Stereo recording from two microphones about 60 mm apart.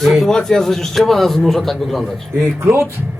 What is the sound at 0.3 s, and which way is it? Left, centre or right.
A man's voice, centre.